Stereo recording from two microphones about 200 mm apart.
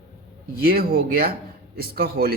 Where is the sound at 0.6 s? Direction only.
50° right (ahead or behind).